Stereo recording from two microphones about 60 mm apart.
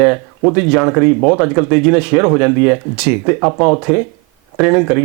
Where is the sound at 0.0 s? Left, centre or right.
Right.